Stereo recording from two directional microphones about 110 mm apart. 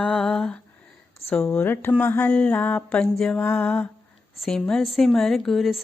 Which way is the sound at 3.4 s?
20° left (ahead or behind).